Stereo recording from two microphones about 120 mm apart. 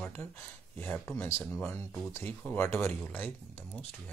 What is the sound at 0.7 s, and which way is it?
Speech, 15° left (ahead or behind).